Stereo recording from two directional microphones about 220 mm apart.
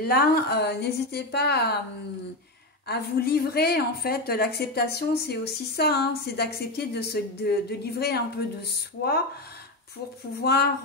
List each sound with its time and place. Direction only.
0.0 s a woman's voice: 45° left (ahead or behind)
2.9 s a woman's voice: 45° left (ahead or behind)
10.4 s a woman's voice: 45° left (ahead or behind)